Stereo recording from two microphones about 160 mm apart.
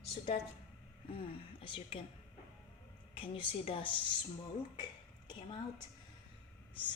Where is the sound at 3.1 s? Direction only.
35° left (ahead or behind).